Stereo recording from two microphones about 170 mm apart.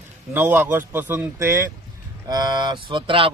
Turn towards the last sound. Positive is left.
turn(degrees=-30)  # may be behind; listen again after turning